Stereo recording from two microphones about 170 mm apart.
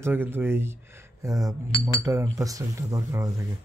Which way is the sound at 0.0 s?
10° right (ahead or behind).